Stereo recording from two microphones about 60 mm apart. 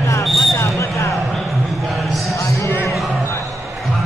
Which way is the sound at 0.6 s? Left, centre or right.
Left.